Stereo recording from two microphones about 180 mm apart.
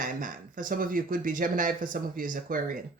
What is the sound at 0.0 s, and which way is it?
Speech, 50° right (ahead or behind).